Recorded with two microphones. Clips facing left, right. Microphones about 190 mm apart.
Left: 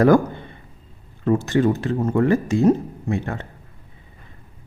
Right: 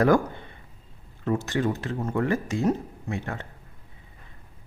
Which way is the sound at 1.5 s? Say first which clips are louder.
Left 8 dB; 30° left (ahead or behind).